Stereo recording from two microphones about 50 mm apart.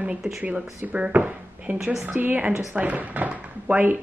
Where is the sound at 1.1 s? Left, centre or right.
Right.